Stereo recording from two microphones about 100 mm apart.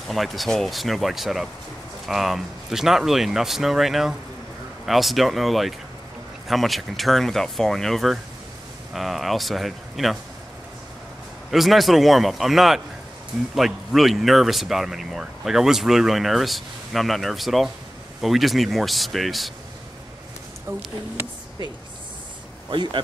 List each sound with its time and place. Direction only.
0.1 s speech: centre (ahead or behind)
11.5 s speech: centre (ahead or behind)
22.7 s speech: 50° right (ahead or behind)